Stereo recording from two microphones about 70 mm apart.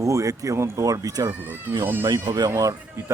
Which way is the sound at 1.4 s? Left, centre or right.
Right.